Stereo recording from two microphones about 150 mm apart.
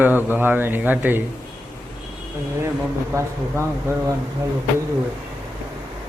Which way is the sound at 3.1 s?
20° right (ahead or behind).